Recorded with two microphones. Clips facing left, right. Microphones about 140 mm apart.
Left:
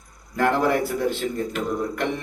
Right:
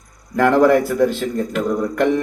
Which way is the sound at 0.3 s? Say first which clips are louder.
Right 7 dB; 55° right (ahead or behind).